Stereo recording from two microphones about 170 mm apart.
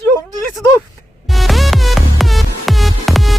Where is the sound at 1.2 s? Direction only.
Centre (ahead or behind).